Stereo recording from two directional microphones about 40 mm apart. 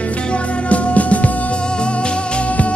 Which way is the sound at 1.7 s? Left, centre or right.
Left.